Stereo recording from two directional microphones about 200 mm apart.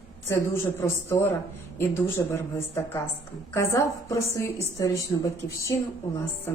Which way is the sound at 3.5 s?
15° left (ahead or behind).